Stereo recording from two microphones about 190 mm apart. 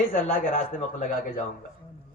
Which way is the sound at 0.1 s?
45° left (ahead or behind).